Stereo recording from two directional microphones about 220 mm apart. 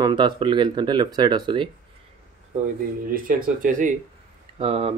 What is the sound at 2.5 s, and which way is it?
Speech, 35° right (ahead or behind).